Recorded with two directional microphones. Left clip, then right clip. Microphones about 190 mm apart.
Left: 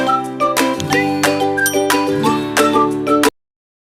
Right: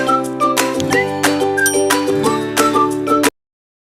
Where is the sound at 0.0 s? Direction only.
Centre (ahead or behind).